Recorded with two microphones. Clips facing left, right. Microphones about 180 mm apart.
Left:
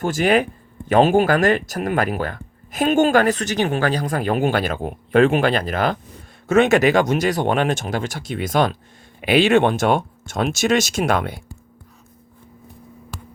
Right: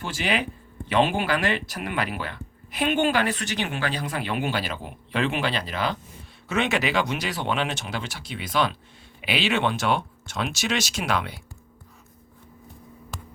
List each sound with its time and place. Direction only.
0.0 s speech: 50° left (ahead or behind)